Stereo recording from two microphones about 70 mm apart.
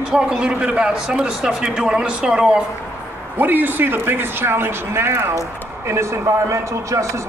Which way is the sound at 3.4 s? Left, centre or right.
Right.